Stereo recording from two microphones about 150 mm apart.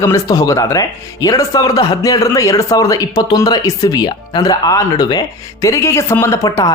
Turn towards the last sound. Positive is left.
turn(degrees=20)  # may be behind; listen again after turning